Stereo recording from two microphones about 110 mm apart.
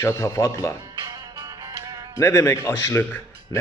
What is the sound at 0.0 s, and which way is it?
Speech, 25° left (ahead or behind).